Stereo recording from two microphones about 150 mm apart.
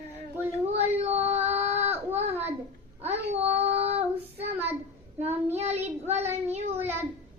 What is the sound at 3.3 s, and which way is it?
Child singing, 45° right (ahead or behind).